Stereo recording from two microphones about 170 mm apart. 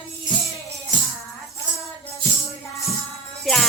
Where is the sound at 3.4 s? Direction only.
Centre (ahead or behind).